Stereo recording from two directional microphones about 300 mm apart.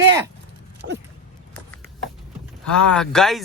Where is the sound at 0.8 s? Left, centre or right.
Right.